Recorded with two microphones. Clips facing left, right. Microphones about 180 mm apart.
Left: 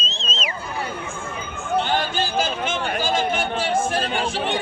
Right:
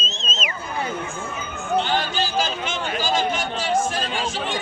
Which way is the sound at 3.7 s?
55° left (ahead or behind).